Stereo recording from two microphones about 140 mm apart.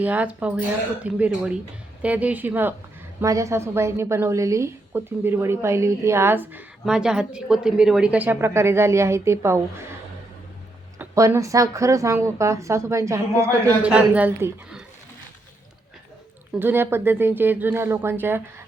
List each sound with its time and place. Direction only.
0.0 s a woman's voice: 10° right (ahead or behind)
10.9 s a woman's voice: 20° right (ahead or behind)
13.8 s speech: 10° right (ahead or behind)
16.6 s speech: 15° right (ahead or behind)